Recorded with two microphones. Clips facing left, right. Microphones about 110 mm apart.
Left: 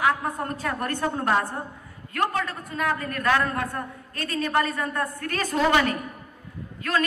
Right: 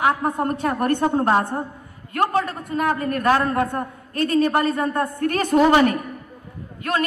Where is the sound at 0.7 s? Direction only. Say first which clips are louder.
Right 7 dB; 35° right (ahead or behind).